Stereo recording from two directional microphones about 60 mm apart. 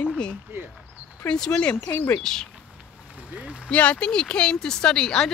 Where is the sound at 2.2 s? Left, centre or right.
Centre.